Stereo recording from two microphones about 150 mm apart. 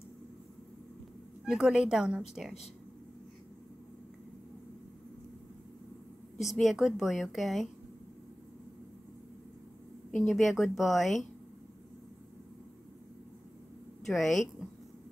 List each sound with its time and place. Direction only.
1.4 s a woman's voice: 5° right (ahead or behind)
6.4 s a woman's voice: centre (ahead or behind)
10.1 s a woman's voice: centre (ahead or behind)
14.0 s a woman's voice: centre (ahead or behind)